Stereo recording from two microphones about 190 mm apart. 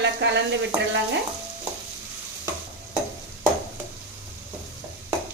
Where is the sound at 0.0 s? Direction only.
65° right (ahead or behind).